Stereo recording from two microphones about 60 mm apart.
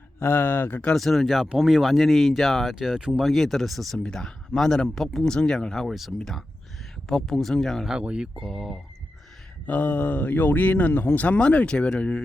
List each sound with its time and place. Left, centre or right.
0.2 s speech: left
0.9 s speech: centre
7.9 s speech: centre
9.6 s speech: left